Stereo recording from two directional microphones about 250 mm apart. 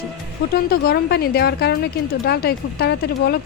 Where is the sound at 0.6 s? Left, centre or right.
Left.